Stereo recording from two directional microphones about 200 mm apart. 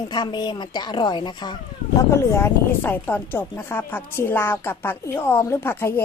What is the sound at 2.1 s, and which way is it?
Speech, 10° left (ahead or behind).